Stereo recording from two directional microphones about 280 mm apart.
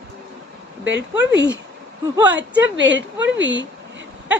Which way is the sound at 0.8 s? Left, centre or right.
Right.